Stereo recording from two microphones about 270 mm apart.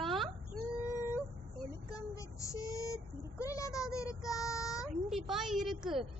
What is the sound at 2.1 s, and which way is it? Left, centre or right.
Child singing, centre.